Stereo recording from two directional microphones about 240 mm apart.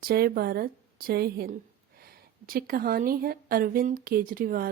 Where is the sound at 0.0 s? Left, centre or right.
Right.